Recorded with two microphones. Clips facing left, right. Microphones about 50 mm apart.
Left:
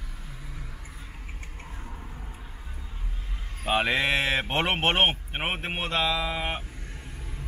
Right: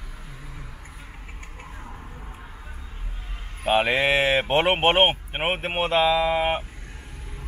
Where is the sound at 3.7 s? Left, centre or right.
Centre.